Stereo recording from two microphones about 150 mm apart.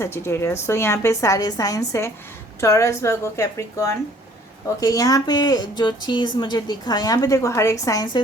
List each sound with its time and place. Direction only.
0.0 s a woman's voice: 15° left (ahead or behind)